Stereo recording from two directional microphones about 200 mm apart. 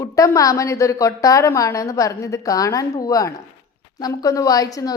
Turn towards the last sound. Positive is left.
turn(degrees=15)  # may be behind; listen again after turning